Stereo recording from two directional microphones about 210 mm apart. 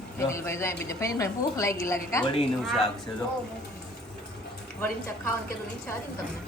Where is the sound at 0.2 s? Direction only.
15° left (ahead or behind).